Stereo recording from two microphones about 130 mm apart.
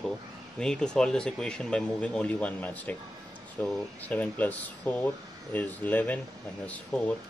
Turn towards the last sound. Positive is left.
turn(degrees=10)  # may be behind; listen again after turning